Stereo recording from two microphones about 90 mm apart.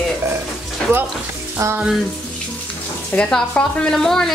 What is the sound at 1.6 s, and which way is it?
Frying, 35° right (ahead or behind).